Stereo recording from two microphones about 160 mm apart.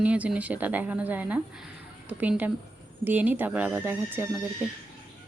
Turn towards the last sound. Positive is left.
turn(degrees=-5)  # may be behind; listen again after turning